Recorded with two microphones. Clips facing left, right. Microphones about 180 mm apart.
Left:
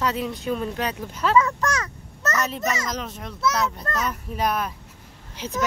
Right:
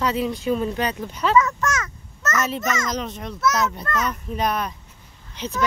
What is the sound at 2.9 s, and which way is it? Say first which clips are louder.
A child's voice: right 3 dB; centre (ahead or behind).